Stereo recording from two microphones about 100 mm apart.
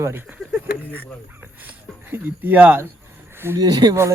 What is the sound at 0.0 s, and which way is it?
Speech, 25° right (ahead or behind).